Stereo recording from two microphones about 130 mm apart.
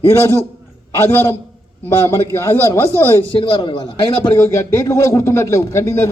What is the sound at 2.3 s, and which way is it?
Speech, 15° left (ahead or behind).